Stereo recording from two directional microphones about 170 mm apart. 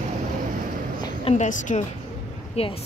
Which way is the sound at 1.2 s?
45° left (ahead or behind).